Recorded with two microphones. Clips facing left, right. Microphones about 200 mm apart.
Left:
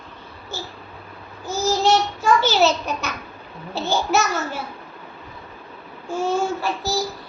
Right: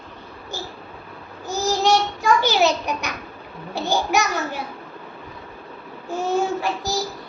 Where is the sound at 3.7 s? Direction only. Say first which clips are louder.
Even; 15° right (ahead or behind).